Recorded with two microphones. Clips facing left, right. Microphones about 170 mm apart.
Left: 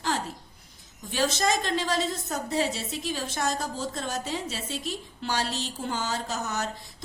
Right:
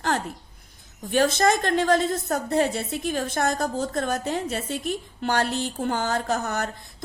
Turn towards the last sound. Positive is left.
turn(degrees=-55)  # may be behind; listen again after turning